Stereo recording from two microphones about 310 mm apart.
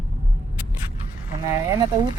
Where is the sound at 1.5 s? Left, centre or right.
Centre.